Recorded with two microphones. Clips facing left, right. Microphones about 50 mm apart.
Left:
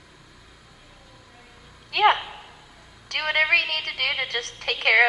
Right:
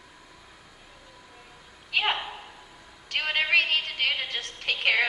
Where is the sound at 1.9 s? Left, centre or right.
Left.